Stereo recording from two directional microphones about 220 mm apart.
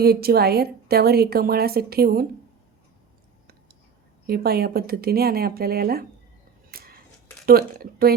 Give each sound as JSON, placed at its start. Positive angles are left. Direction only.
{"t": 0.0, "sound": "a woman's voice", "side_deg": -45}
{"t": 4.3, "sound": "a woman's voice", "side_deg": -45}
{"t": 6.7, "sound": "a sound", "side_deg": -45}
{"t": 7.4, "sound": "speech", "side_deg": -40}